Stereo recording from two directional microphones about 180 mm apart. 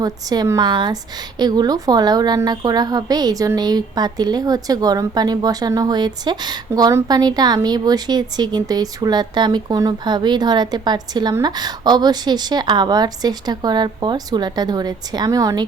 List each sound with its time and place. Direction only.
0.0 s a woman's voice: 20° right (ahead or behind)